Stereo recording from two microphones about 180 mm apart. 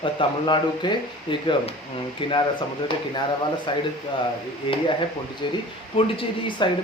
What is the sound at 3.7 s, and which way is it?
Speech, 25° left (ahead or behind).